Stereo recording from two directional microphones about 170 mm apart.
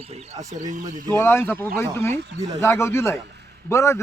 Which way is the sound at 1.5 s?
60° right (ahead or behind).